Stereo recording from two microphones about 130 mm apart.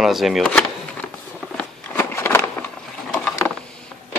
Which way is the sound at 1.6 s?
20° left (ahead or behind).